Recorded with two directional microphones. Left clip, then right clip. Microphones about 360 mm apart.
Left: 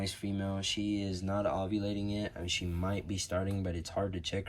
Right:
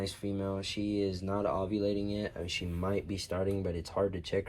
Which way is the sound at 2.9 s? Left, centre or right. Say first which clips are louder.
Right 3 dB; left.